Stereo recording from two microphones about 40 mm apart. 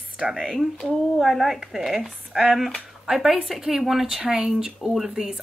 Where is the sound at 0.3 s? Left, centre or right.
Centre.